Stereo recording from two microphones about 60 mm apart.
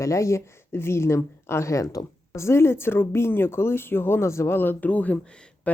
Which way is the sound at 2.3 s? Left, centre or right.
Left.